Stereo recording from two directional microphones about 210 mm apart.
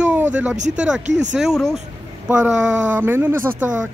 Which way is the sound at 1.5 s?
Centre (ahead or behind).